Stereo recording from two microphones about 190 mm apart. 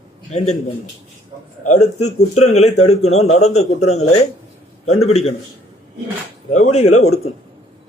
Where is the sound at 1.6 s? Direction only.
40° left (ahead or behind).